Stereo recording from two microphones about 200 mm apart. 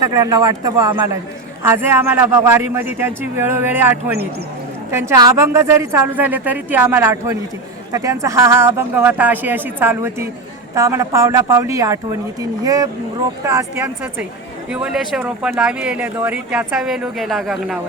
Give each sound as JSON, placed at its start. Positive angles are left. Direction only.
{"t": 0.0, "sound": "speech", "side_deg": -15}